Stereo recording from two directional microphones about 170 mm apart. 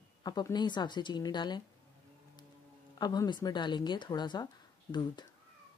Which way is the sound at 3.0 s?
25° left (ahead or behind).